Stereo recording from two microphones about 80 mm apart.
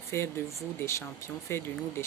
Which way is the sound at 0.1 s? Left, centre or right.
Left.